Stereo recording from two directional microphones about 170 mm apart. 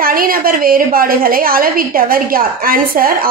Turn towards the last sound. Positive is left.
turn(degrees=-60)  # may be behind; listen again after turning